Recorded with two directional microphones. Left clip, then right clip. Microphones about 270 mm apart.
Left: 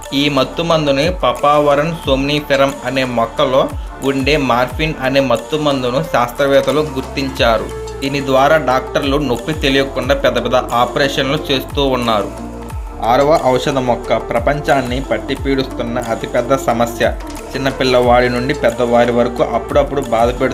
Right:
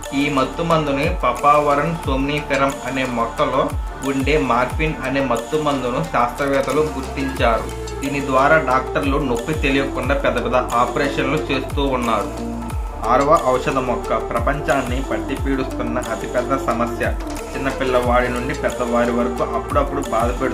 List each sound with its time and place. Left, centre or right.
0.2 s speech: left